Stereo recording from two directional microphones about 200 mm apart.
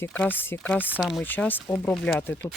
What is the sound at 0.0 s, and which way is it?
Speech, 10° left (ahead or behind).